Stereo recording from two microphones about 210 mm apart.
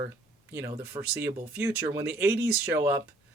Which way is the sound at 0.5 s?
15° right (ahead or behind).